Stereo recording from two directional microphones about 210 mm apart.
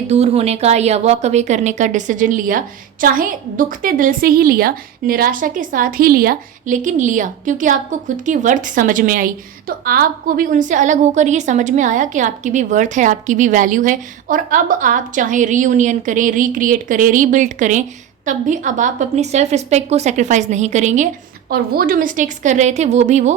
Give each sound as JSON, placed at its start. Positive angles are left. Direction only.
{"t": 0.1, "sound": "a woman's voice", "side_deg": -30}